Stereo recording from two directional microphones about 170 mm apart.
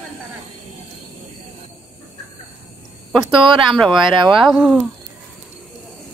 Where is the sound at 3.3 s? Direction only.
30° right (ahead or behind).